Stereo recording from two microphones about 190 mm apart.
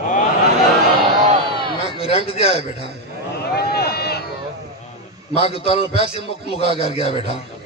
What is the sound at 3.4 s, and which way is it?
Run, 55° left (ahead or behind).